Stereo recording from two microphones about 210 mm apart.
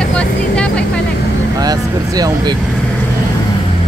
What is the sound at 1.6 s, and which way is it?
Vehicle, 20° right (ahead or behind).